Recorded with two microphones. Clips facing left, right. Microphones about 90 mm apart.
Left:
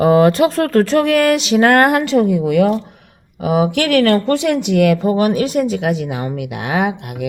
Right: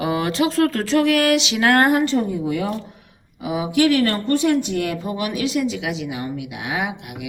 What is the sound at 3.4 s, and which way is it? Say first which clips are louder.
Speech: left 3 dB; 55° left (ahead or behind).